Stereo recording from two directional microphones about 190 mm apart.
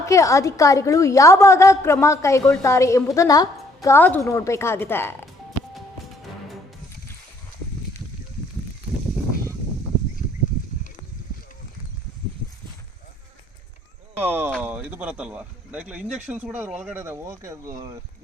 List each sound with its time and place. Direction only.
0.0 s a woman's voice: 15° left (ahead or behind)
14.2 s speech: 10° right (ahead or behind)